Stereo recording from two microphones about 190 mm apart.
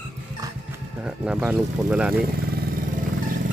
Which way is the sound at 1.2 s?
5° right (ahead or behind).